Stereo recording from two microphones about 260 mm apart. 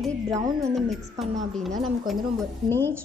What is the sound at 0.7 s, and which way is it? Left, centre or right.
A woman's voice, centre.